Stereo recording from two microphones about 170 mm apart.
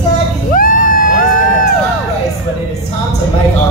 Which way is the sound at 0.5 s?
55° left (ahead or behind).